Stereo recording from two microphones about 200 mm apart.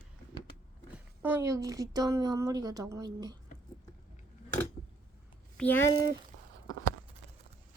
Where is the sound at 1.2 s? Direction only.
10° right (ahead or behind).